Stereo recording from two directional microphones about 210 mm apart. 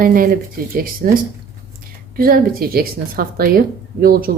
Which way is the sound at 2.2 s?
45° right (ahead or behind).